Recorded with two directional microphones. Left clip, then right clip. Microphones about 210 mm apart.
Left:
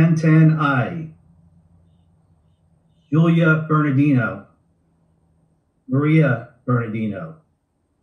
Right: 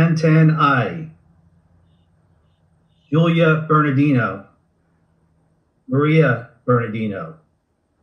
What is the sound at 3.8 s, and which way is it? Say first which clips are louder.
Speech: right 2 dB; 35° right (ahead or behind).